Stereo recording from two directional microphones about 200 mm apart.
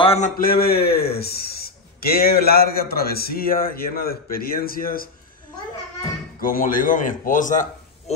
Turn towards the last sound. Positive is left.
turn(degrees=40)  # may be behind; listen again after turning